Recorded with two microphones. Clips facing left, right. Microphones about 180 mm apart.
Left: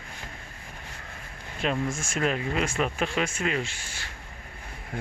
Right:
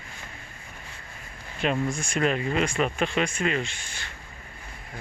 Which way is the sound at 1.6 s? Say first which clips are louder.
Right 2 dB; centre (ahead or behind).